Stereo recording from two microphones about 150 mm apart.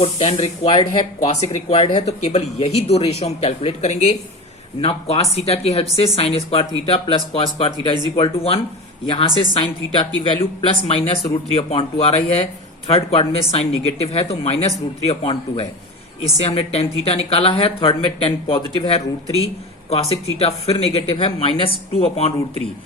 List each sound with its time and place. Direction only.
0.0 s speech: 45° left (ahead or behind)